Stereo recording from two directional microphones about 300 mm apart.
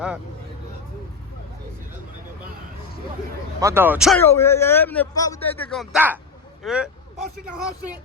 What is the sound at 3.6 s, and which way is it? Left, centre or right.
A man's voice, centre.